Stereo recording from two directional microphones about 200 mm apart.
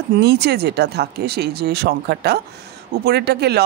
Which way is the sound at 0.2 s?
55° right (ahead or behind).